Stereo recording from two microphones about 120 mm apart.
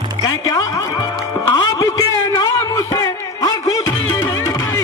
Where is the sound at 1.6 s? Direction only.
30° left (ahead or behind).